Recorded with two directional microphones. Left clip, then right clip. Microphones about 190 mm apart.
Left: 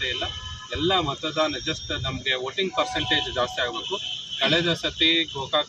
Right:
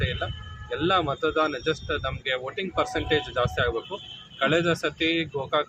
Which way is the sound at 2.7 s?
20° right (ahead or behind).